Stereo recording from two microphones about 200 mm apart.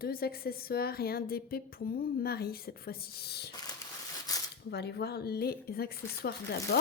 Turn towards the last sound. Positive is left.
turn(degrees=50)  # may be behind; listen again after turning